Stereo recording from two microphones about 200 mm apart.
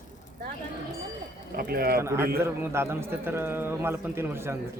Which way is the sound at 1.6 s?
50° right (ahead or behind).